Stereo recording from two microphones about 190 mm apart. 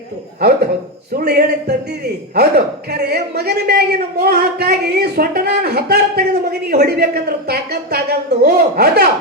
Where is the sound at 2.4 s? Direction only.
55° right (ahead or behind).